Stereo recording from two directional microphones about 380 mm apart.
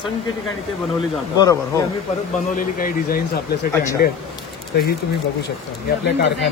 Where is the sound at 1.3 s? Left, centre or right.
Centre.